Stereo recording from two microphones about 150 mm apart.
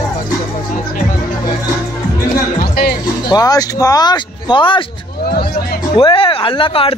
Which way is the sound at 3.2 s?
25° left (ahead or behind).